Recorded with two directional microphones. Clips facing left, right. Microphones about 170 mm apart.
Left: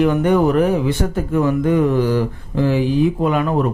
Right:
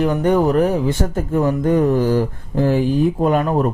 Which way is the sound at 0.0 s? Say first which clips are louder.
Left 1 dB; 40° right (ahead or behind).